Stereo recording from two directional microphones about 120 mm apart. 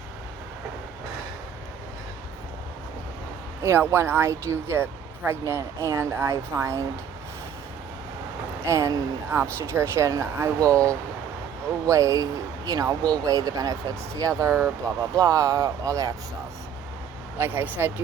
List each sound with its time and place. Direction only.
3.6 s speech: 20° right (ahead or behind)
8.6 s speech: 25° right (ahead or behind)
17.3 s speech: 15° right (ahead or behind)